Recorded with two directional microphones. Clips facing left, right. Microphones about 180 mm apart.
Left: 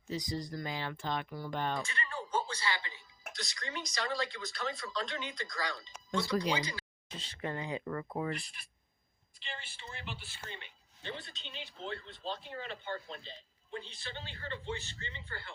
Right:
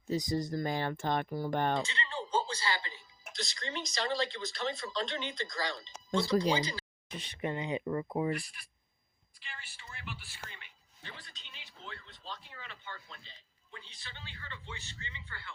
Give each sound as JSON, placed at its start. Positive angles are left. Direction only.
{"t": 0.1, "sound": "speech", "side_deg": -45}
{"t": 1.8, "sound": "speech", "side_deg": -20}
{"t": 8.4, "sound": "a woman's voice", "side_deg": 25}